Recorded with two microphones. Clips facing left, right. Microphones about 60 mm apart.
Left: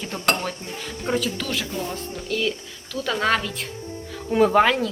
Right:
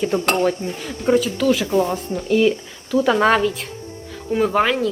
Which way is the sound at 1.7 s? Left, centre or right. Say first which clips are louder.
Right 11 dB; right.